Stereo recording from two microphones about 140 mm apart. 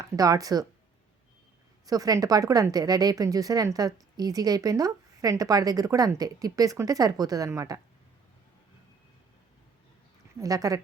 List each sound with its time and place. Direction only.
0.0 s a woman's voice: 25° right (ahead or behind)
1.9 s a woman's voice: 25° right (ahead or behind)
10.4 s a woman's voice: 25° right (ahead or behind)